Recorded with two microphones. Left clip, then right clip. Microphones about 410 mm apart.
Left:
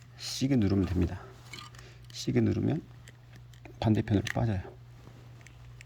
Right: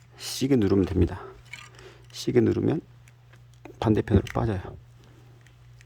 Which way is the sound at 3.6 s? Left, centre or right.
Centre.